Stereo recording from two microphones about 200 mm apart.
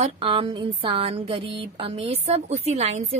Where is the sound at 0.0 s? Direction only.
25° right (ahead or behind).